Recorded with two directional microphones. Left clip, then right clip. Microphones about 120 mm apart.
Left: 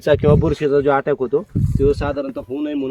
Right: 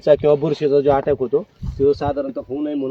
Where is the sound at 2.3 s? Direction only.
90° left.